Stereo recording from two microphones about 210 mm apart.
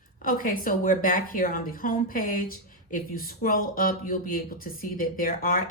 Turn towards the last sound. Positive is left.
turn(degrees=40)  # may be behind; listen again after turning